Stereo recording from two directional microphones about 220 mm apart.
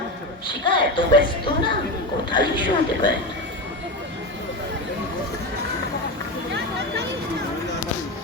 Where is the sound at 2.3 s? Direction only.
20° left (ahead or behind).